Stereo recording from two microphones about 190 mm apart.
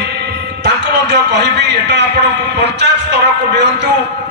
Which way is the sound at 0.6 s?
65° right (ahead or behind).